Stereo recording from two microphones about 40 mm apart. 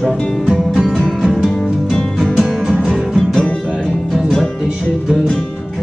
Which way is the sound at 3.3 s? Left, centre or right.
Centre.